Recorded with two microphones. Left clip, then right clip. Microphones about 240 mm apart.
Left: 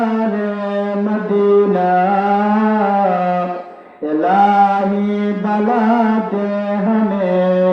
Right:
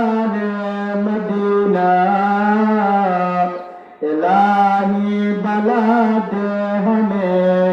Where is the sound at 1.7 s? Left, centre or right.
Right.